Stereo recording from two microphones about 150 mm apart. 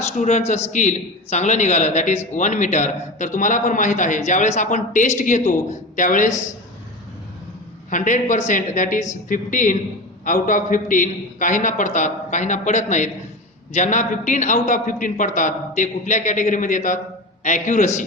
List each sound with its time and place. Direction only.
0.2 s a man's voice: 50° left (ahead or behind)
7.9 s a man's voice: 60° left (ahead or behind)